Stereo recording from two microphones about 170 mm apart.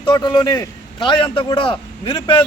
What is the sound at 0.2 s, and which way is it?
Speech, 25° left (ahead or behind).